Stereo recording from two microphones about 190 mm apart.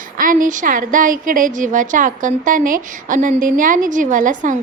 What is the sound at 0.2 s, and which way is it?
A woman's voice, 45° right (ahead or behind).